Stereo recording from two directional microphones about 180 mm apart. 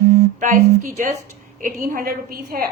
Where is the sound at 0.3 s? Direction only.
45° right (ahead or behind).